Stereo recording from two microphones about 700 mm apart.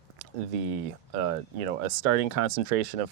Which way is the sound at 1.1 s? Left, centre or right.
Right.